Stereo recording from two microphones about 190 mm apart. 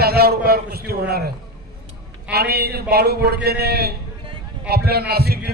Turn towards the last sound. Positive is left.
turn(degrees=-55)  # may be behind; listen again after turning